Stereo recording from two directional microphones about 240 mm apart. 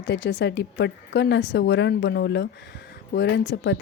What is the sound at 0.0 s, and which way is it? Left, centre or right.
A woman's voice, left.